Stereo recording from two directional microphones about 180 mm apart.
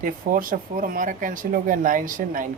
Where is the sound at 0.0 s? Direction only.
50° right (ahead or behind).